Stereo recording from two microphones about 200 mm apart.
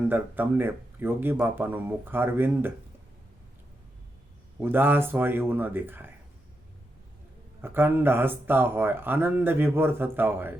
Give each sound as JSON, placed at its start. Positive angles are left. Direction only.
{"t": 0.1, "sound": "speech", "side_deg": -10}
{"t": 4.6, "sound": "speech", "side_deg": -10}
{"t": 7.6, "sound": "speech", "side_deg": -10}